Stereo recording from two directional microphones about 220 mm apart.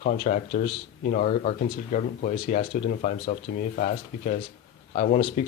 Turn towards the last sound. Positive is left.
turn(degrees=40)  # may be behind; listen again after turning